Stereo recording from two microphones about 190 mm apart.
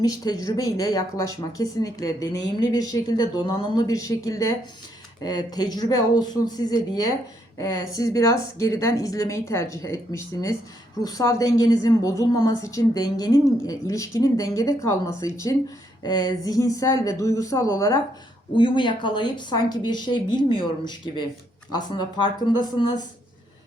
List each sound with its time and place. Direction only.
0.0 s a woman's voice: 20° left (ahead or behind)